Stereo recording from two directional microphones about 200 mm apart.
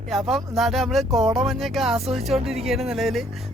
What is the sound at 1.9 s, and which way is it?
Speech, 30° right (ahead or behind).